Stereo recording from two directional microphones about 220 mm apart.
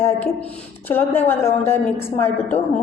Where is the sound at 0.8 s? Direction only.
10° left (ahead or behind).